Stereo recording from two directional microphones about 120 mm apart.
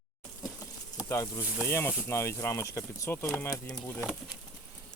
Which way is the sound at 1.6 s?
20° left (ahead or behind).